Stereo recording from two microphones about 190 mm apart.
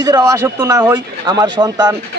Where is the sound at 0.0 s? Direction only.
20° right (ahead or behind).